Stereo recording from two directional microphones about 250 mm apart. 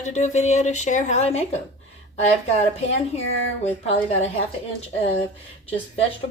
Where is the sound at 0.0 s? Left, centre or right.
Left.